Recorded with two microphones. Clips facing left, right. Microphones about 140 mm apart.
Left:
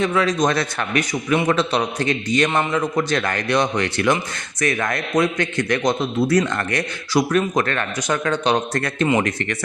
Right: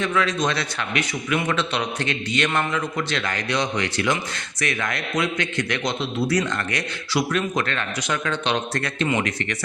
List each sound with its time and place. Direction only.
0.0 s a man's voice: 35° left (ahead or behind)
1.3 s a man's voice: 35° left (ahead or behind)